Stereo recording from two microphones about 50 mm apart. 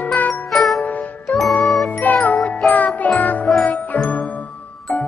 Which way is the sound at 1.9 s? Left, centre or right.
Left.